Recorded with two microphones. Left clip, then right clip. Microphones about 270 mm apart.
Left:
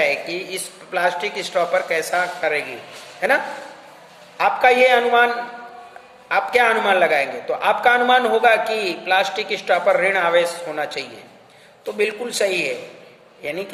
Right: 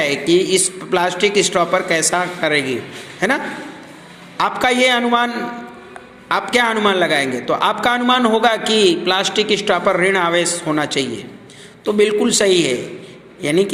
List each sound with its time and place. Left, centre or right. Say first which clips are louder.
0.0 s a man's voice: right 5 dB; centre